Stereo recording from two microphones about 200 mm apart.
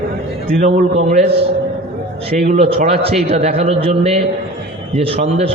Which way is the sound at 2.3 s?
35° right (ahead or behind).